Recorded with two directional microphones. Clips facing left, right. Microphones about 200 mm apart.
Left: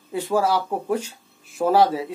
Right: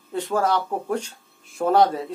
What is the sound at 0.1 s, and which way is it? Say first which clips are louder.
Speech: left 1 dB; 10° left (ahead or behind).